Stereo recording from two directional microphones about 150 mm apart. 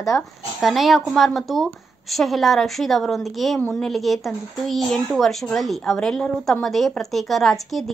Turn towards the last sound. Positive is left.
turn(degrees=0)  # may be behind; listen again after turning